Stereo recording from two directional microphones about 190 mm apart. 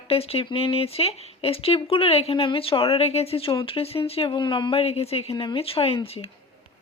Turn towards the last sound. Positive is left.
turn(degrees=30)  # may be behind; listen again after turning